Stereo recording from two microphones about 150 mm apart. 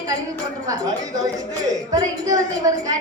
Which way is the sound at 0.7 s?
25° right (ahead or behind).